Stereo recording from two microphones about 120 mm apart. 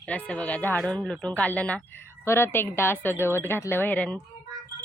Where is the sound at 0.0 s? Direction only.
10° left (ahead or behind).